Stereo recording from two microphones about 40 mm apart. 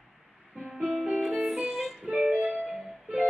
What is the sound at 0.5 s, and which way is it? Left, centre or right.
Music, centre.